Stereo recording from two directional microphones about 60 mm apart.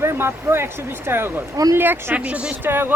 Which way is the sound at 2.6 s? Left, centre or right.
Right.